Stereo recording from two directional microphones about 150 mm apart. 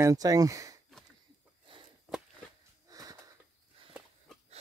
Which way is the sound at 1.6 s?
35° right (ahead or behind).